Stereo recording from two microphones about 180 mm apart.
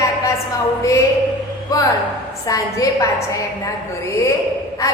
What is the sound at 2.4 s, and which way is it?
Speech, 20° left (ahead or behind).